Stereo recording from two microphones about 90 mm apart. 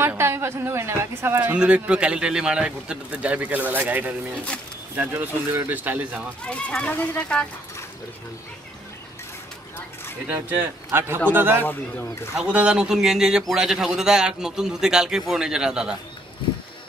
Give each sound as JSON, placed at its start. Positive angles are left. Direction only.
{"t": 0.0, "sound": "a man's voice", "side_deg": -25}
{"t": 6.4, "sound": "speech", "side_deg": 15}
{"t": 10.2, "sound": "speech", "side_deg": -20}
{"t": 11.6, "sound": "speech", "side_deg": 25}
{"t": 12.4, "sound": "a man's voice", "side_deg": -10}